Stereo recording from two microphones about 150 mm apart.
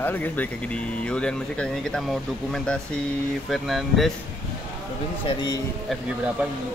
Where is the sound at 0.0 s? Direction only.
10° left (ahead or behind).